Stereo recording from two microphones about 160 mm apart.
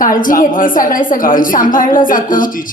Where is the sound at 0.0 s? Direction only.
60° left (ahead or behind).